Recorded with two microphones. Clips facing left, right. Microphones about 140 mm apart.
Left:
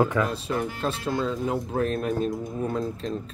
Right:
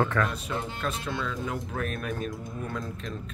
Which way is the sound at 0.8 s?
35° left (ahead or behind).